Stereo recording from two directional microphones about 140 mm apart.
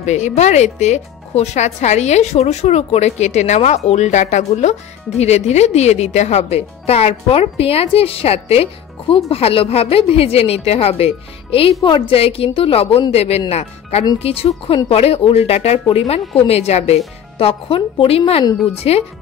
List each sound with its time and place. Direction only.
0.0 s a woman's voice: 55° left (ahead or behind)